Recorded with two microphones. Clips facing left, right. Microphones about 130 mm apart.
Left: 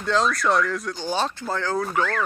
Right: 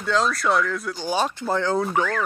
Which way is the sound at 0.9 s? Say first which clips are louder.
Right 4 dB; 10° right (ahead or behind).